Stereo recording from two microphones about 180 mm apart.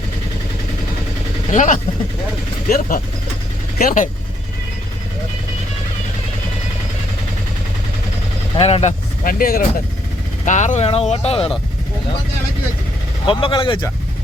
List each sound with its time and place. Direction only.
1.5 s speech: 45° left (ahead or behind)
2.6 s speech: 55° left (ahead or behind)
8.5 s speech: 35° left (ahead or behind)
13.2 s speech: 25° left (ahead or behind)